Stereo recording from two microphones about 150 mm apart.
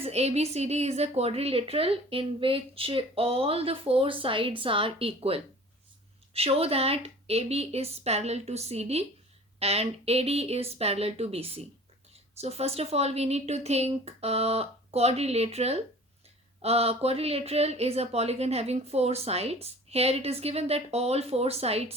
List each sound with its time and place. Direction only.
0.0 s a woman's voice: 45° right (ahead or behind)